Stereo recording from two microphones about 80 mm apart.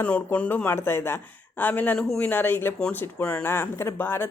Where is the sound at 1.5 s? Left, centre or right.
Left.